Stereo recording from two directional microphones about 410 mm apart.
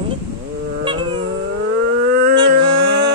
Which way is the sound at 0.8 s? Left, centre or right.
Centre.